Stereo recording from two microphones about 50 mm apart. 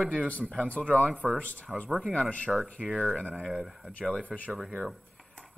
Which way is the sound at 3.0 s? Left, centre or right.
Centre.